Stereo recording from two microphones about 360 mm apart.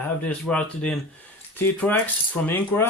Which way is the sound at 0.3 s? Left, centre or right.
Centre.